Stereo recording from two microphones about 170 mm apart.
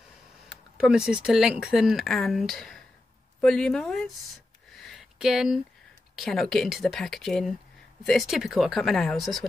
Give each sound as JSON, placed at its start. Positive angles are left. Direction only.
{"t": 0.5, "sound": "speech", "side_deg": -5}
{"t": 4.7, "sound": "a sound", "side_deg": 0}
{"t": 6.1, "sound": "speech", "side_deg": 0}